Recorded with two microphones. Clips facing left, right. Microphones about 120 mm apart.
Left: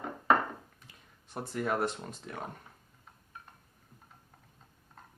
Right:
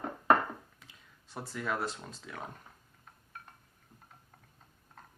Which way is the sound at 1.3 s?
55° left (ahead or behind).